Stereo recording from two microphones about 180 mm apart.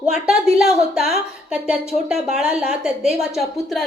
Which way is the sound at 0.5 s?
Centre (ahead or behind).